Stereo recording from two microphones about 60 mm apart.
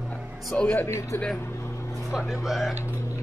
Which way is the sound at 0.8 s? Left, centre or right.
Left.